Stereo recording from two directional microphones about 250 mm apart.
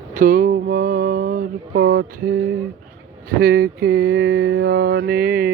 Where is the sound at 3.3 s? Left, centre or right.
Right.